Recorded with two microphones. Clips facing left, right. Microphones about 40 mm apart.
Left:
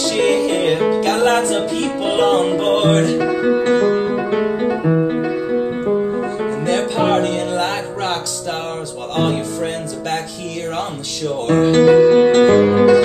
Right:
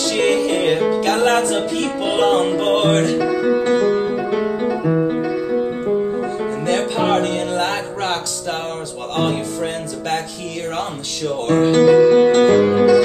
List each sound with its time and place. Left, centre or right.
0.0 s music: centre
3.2 s music: left
6.6 s music: centre
11.7 s music: left